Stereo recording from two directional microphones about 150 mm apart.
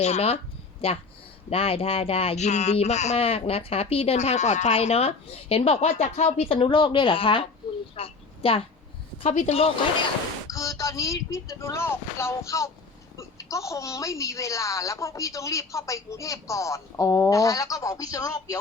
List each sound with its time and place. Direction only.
0.0 s speech: 45° left (ahead or behind)
7.9 s a sound: 40° left (ahead or behind)
9.2 s speech: 45° left (ahead or behind)
10.5 s a woman's voice: 20° left (ahead or behind)